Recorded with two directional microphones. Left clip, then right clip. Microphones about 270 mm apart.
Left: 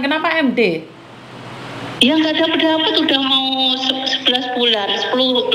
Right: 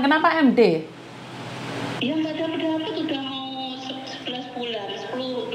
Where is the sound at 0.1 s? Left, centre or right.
Centre.